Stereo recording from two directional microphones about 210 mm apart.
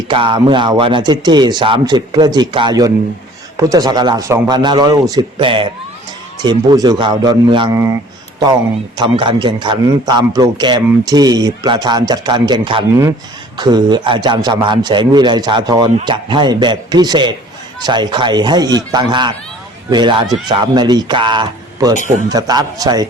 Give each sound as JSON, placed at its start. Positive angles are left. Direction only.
{"t": 0.1, "sound": "a man's voice", "side_deg": -25}
{"t": 9.0, "sound": "a man's voice", "side_deg": -20}